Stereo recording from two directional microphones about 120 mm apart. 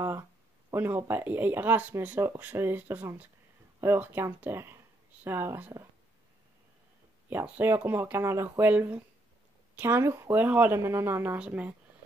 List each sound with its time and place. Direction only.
0.7 s speech: 20° right (ahead or behind)
7.2 s speech: 15° right (ahead or behind)